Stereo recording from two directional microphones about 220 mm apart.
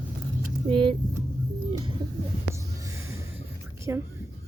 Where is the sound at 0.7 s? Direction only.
25° right (ahead or behind).